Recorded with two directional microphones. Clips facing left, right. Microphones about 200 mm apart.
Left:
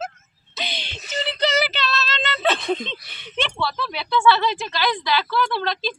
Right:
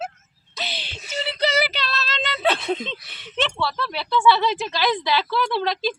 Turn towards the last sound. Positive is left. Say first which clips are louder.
# right 2 dB
turn(degrees=-5)  # may be behind; listen again after turning